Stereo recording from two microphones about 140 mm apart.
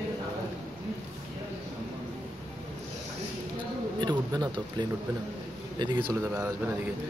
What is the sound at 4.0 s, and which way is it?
A man's voice, 30° right (ahead or behind).